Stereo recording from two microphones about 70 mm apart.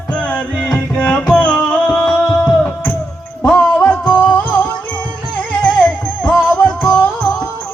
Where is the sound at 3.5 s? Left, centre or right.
Centre.